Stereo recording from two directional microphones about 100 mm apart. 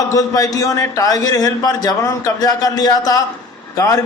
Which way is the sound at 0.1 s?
35° left (ahead or behind).